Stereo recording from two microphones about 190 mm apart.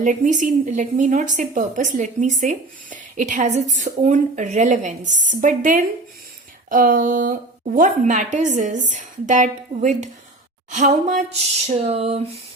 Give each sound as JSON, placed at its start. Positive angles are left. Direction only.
{"t": 0.0, "sound": "a woman's voice", "side_deg": -40}